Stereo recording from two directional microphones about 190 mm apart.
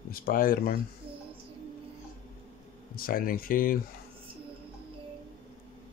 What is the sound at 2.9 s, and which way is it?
Speech, 50° left (ahead or behind).